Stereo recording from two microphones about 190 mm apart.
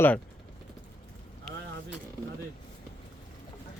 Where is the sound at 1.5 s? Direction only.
Centre (ahead or behind).